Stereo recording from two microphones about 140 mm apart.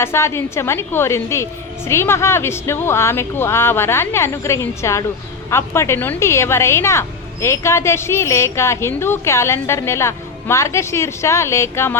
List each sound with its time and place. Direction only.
0.0 s a woman's voice: 20° left (ahead or behind)